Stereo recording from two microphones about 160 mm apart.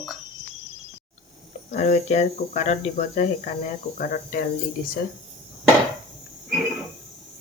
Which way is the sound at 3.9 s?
60° left (ahead or behind).